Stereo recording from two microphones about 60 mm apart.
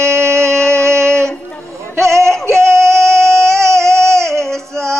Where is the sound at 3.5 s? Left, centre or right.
Right.